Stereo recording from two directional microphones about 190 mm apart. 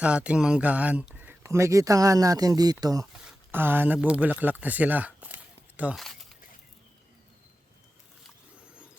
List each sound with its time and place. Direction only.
0.0 s speech: 5° right (ahead or behind)
3.1 s speech: 5° right (ahead or behind)